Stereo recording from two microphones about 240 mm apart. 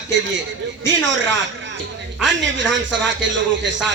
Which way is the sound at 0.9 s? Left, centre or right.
Right.